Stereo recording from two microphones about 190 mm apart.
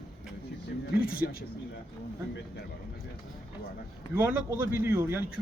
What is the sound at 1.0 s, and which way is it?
Speech, 50° left (ahead or behind).